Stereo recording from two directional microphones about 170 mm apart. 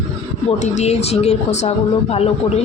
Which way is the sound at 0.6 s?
40° left (ahead or behind).